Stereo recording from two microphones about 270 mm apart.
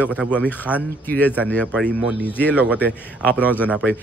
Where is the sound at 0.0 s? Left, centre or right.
Centre.